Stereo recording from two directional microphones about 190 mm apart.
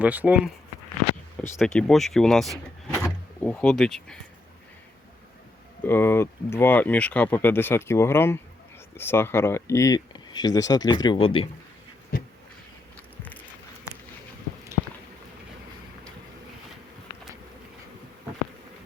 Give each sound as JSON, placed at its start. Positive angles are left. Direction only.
{"t": 0.0, "sound": "speech", "side_deg": -5}
{"t": 1.5, "sound": "speech", "side_deg": 0}
{"t": 5.8, "sound": "speech", "side_deg": 10}
{"t": 12.1, "sound": "a sound", "side_deg": 50}